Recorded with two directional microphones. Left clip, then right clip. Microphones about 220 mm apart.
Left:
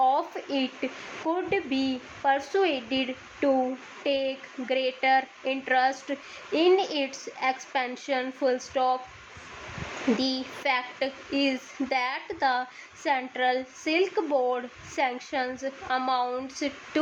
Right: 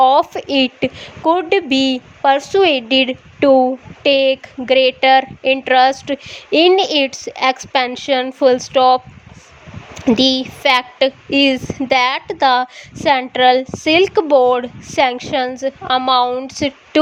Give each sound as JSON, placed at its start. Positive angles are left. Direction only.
{"t": 0.0, "sound": "speech", "side_deg": -40}
{"t": 10.2, "sound": "speech", "side_deg": -40}